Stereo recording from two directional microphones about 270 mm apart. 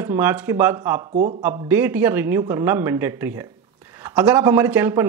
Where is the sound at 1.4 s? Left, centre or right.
Centre.